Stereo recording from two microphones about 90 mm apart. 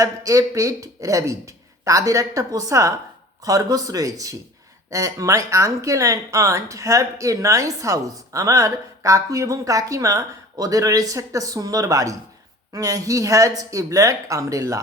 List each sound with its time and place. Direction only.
0.0 s a woman's voice: 40° right (ahead or behind)